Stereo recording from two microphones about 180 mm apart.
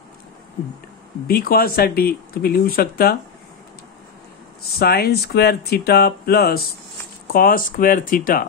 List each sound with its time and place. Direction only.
1.2 s speech: 55° left (ahead or behind)
4.7 s speech: 60° left (ahead or behind)